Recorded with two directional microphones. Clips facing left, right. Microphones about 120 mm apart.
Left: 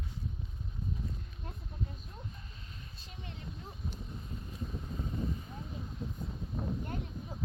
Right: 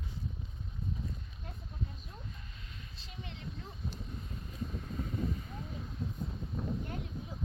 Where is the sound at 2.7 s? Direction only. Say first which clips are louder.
Even; 35° left (ahead or behind).